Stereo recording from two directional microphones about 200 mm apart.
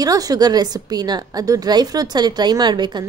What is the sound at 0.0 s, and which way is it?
A woman's voice, 20° right (ahead or behind).